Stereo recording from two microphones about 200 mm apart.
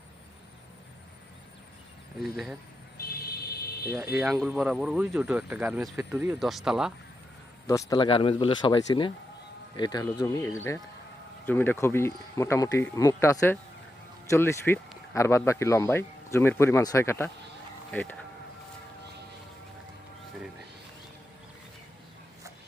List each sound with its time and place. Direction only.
2.2 s speech: centre (ahead or behind)
3.9 s speech: 10° right (ahead or behind)
7.7 s speech: 20° left (ahead or behind)